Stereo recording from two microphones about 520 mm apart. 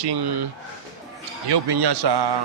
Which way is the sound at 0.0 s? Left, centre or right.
Right.